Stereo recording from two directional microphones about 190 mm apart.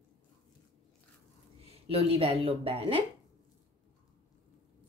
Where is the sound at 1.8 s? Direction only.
30° right (ahead or behind).